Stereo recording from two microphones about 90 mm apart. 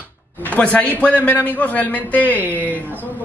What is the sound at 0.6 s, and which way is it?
A man's voice, 15° left (ahead or behind).